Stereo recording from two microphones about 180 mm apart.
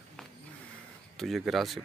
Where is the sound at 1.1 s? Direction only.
Centre (ahead or behind).